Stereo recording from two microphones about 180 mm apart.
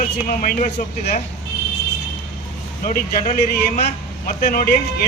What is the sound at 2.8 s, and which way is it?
A man's voice, 55° left (ahead or behind).